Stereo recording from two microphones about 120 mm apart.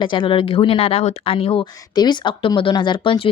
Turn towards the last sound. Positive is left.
turn(degrees=45)  # may be behind; listen again after turning